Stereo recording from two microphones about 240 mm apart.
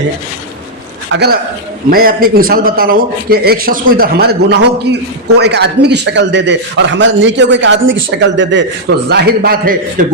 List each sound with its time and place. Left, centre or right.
1.1 s a man's voice: right